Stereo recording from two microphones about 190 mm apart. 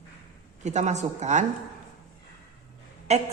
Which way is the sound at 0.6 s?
35° right (ahead or behind).